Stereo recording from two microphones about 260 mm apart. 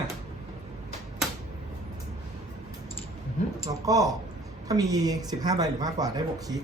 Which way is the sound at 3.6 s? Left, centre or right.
Centre.